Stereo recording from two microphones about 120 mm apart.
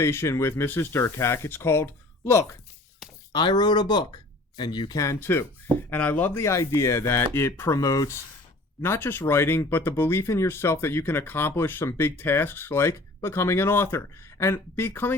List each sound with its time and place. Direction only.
0.0 s speech: 20° left (ahead or behind)
3.3 s speech: 35° left (ahead or behind); by 15.1 s 20° left (ahead or behind)